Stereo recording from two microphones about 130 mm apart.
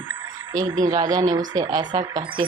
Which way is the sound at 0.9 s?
30° right (ahead or behind).